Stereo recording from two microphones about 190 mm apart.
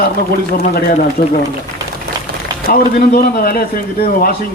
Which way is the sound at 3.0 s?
50° left (ahead or behind).